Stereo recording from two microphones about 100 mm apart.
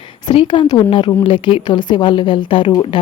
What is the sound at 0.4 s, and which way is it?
Speech, 50° left (ahead or behind).